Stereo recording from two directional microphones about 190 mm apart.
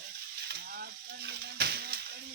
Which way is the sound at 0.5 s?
55° right (ahead or behind).